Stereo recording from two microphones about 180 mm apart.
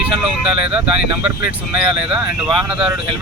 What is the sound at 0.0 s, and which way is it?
Speech, 5° right (ahead or behind).